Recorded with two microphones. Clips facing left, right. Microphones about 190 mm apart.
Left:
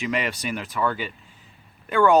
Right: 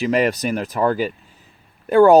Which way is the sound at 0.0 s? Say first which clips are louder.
Right 8 dB; 40° right (ahead or behind).